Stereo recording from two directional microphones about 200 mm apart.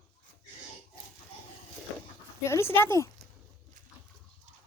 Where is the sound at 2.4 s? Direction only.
15° left (ahead or behind).